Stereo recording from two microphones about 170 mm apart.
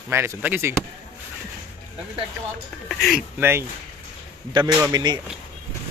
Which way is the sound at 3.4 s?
15° right (ahead or behind).